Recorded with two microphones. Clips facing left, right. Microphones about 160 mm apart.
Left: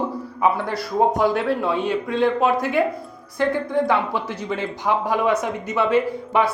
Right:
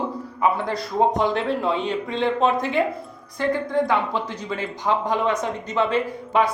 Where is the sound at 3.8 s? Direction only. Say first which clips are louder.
Left 1 dB; 15° right (ahead or behind).